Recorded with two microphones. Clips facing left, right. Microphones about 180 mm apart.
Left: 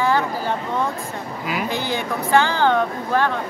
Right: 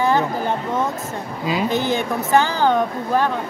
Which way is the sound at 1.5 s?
25° right (ahead or behind).